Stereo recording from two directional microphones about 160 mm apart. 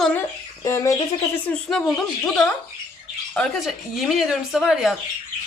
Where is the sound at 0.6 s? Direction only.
20° left (ahead or behind).